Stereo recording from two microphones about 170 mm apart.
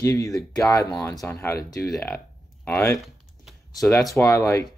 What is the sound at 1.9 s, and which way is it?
Speech, 5° left (ahead or behind).